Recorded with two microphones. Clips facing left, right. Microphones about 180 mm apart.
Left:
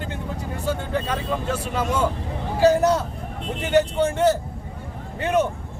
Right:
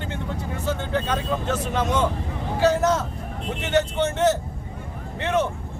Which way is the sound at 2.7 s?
35° left (ahead or behind).